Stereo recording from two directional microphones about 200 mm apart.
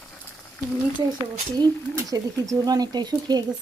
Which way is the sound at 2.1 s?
15° right (ahead or behind).